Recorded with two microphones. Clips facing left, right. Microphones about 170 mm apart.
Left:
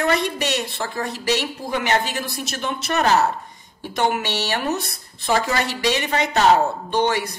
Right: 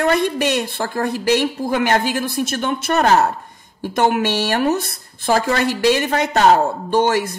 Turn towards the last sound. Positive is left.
turn(degrees=-50)  # may be behind; listen again after turning